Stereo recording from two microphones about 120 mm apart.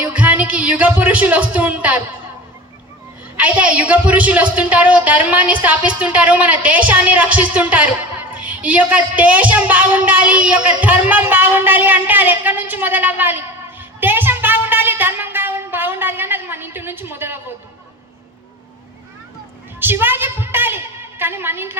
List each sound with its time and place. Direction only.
0.1 s speech: 10° right (ahead or behind)
3.3 s a woman's voice: 10° right (ahead or behind)
14.0 s a sound: 15° right (ahead or behind)
19.8 s a woman's voice: 15° right (ahead or behind)